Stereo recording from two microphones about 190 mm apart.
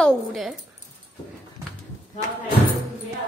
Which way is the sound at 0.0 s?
Centre (ahead or behind).